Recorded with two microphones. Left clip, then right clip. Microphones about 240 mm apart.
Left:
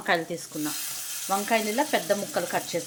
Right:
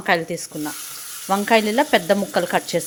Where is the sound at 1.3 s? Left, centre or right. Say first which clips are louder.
Right 8 dB; right.